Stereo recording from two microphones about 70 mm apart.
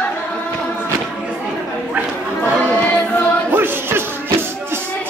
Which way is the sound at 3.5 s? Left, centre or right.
Right.